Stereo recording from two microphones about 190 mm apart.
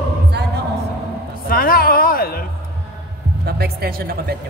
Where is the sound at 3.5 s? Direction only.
55° right (ahead or behind).